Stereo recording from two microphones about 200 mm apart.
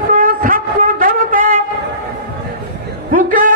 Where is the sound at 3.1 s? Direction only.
40° right (ahead or behind).